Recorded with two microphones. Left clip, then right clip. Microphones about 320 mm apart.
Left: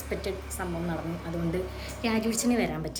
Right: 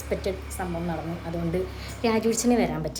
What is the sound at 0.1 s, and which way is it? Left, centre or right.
A woman's voice, centre.